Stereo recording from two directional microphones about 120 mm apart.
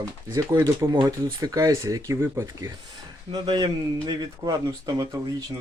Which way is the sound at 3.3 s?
35° right (ahead or behind).